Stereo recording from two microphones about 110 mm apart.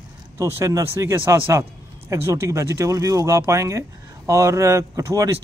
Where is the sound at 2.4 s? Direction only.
25° right (ahead or behind).